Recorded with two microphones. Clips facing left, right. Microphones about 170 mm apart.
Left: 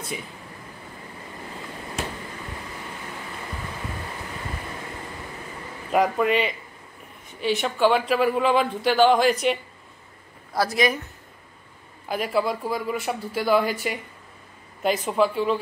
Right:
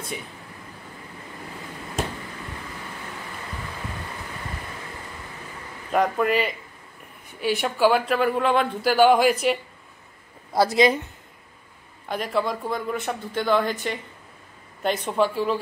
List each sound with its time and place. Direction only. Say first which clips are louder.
5.9 s speech: left 1 dB; centre (ahead or behind)
10.5 s speech: right 4 dB; 25° right (ahead or behind)
12.1 s speech: left 1 dB; 5° left (ahead or behind)